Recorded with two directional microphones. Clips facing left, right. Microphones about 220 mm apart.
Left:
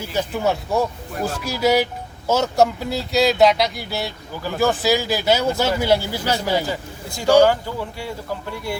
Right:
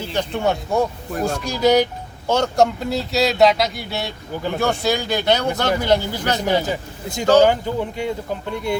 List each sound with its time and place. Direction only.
0.0 s speech: 5° left (ahead or behind)
6.7 s speech: 20° right (ahead or behind)